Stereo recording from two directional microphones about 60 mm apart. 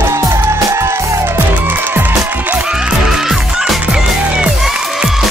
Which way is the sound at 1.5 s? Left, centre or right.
Right.